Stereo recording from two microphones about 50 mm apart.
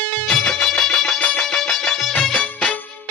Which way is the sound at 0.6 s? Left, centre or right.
Centre.